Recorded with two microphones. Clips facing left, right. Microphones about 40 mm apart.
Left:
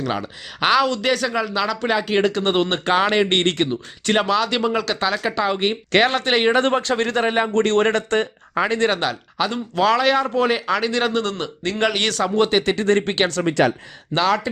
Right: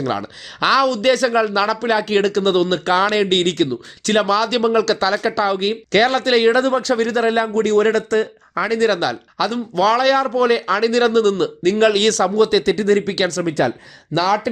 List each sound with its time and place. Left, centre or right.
0.0 s speech: centre
2.3 s speech: left
2.9 s speech: centre
6.6 s speech: left
7.3 s speech: centre
7.5 s speech: left; by 12.3 s centre
12.4 s speech: left
13.4 s speech: left
14.3 s speech: centre